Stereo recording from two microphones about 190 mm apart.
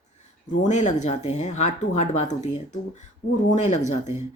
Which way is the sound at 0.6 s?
40° left (ahead or behind).